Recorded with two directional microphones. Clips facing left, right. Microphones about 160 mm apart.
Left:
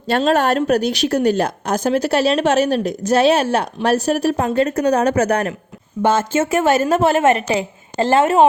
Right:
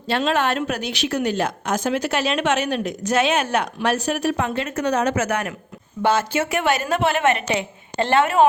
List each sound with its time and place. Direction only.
0.2 s a woman's voice: 40° left (ahead or behind)
6.1 s speech: 50° left (ahead or behind)
7.2 s a woman's voice: 35° left (ahead or behind)